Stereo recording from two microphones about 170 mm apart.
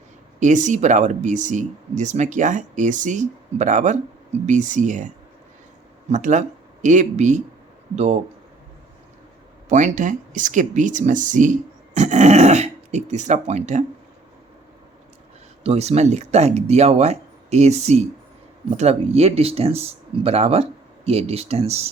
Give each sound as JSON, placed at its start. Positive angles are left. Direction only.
{"t": 0.3, "sound": "speech", "side_deg": -45}
{"t": 6.1, "sound": "speech", "side_deg": -45}
{"t": 9.6, "sound": "speech", "side_deg": -45}
{"t": 15.6, "sound": "speech", "side_deg": -35}